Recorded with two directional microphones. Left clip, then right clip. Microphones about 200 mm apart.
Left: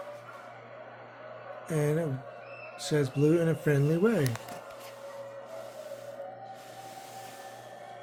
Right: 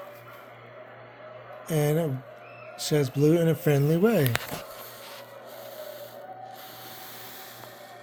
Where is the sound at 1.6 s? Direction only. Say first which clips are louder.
Right 4 dB; 35° right (ahead or behind).